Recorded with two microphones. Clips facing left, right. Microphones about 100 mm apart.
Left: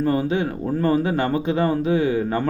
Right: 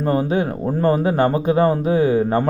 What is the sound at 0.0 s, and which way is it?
Speech, 40° right (ahead or behind).